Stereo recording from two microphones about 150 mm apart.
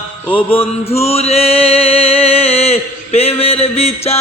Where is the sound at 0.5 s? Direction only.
45° left (ahead or behind).